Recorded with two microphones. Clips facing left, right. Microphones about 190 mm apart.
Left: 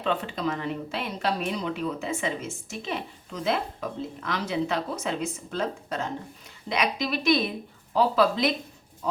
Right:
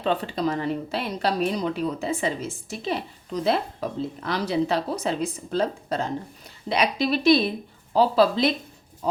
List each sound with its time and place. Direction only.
0.0 s speech: 35° right (ahead or behind)